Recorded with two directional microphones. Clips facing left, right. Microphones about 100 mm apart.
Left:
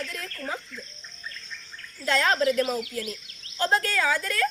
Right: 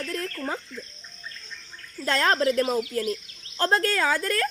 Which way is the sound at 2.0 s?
40° right (ahead or behind).